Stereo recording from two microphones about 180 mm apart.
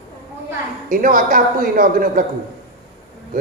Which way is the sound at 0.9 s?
50° right (ahead or behind).